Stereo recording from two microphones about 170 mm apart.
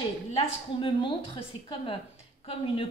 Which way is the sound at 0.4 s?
30° left (ahead or behind).